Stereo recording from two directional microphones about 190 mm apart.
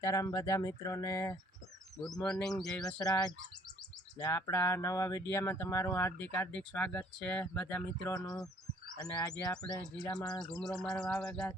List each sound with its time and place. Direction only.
0.0 s speech: 15° left (ahead or behind)
2.0 s speech: 5° left (ahead or behind)
2.8 s speech: 20° left (ahead or behind)
10.6 s speech: 5° left (ahead or behind)